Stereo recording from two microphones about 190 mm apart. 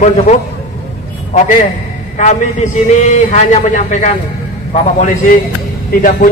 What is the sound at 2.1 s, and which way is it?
A man's voice, 40° left (ahead or behind).